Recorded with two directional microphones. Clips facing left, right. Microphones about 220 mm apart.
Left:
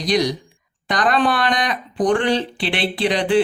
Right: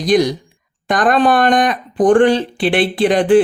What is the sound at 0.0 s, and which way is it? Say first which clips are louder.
Speech: right 5 dB; 50° right (ahead or behind).